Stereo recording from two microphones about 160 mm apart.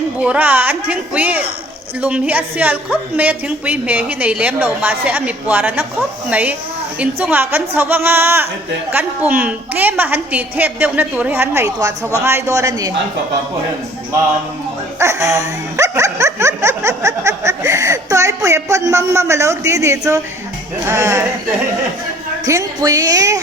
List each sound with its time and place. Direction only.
0.2 s speech: 10° right (ahead or behind)
12.2 s music: 20° right (ahead or behind)
14.9 s speech: 20° right (ahead or behind)
22.4 s music: 20° right (ahead or behind)